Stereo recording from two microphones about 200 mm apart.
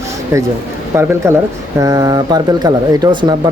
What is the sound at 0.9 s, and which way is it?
Speech, 15° right (ahead or behind).